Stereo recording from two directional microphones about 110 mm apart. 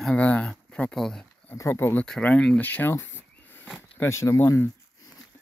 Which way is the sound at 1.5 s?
25° left (ahead or behind).